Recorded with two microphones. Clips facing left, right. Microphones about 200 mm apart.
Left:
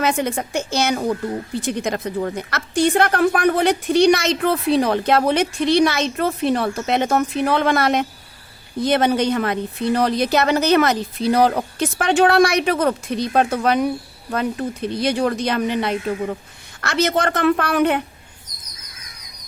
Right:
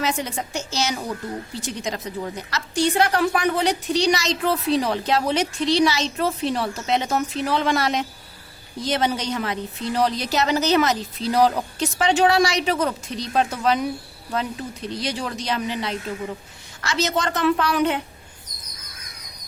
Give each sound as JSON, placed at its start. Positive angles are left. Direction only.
{"t": 0.0, "sound": "a woman's voice", "side_deg": 55}